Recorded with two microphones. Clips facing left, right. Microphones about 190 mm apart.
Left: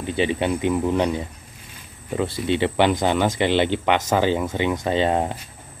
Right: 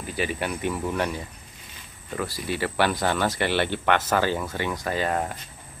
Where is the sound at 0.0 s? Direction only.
25° left (ahead or behind).